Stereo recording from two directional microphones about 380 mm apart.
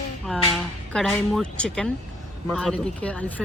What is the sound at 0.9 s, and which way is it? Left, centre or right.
Speech, centre.